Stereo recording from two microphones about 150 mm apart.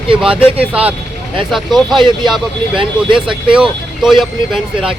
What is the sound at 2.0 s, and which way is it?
Speech, 30° right (ahead or behind).